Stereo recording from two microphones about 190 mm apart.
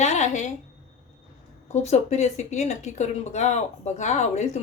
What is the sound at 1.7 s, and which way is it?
Speech, 35° left (ahead or behind).